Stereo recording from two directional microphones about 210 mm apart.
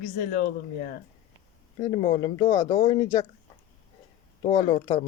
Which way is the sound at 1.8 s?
20° left (ahead or behind).